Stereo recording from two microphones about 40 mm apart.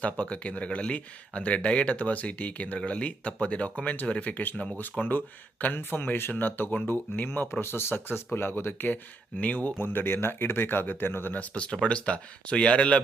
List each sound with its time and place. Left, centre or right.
0.0 s speech: left
4.5 s speech: centre
4.8 s speech: left
7.6 s speech: left
9.4 s speech: left
9.7 s speech: left
11.3 s speech: left